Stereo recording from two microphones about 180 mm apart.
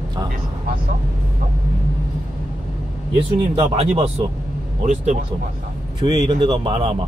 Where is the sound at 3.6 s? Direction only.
35° right (ahead or behind).